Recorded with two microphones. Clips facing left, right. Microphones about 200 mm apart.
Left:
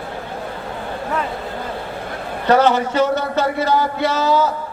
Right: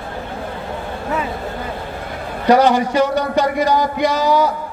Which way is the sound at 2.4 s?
15° right (ahead or behind).